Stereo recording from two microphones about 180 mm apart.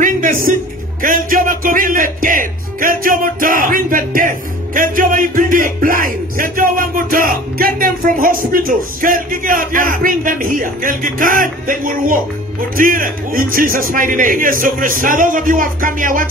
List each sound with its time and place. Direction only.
0.0 s music: 50° right (ahead or behind)
1.0 s speech: 50° right (ahead or behind)